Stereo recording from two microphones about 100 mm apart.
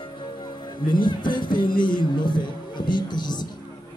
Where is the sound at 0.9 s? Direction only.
50° left (ahead or behind).